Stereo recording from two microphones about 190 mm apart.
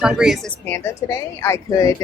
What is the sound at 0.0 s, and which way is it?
A woman's voice, 5° right (ahead or behind).